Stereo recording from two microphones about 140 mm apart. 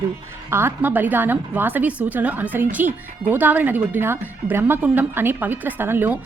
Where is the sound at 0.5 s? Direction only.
15° right (ahead or behind).